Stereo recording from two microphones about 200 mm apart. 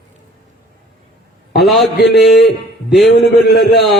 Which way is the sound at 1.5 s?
Centre (ahead or behind).